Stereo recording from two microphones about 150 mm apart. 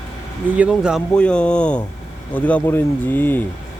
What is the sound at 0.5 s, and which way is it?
Speech, 5° right (ahead or behind).